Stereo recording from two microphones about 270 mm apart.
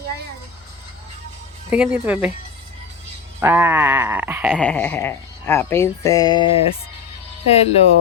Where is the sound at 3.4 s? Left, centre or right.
Centre.